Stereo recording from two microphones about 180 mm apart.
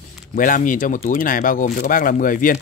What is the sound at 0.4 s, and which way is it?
Speech, 50° left (ahead or behind).